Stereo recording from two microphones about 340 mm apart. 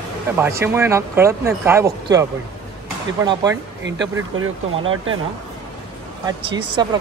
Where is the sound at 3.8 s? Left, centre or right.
Right.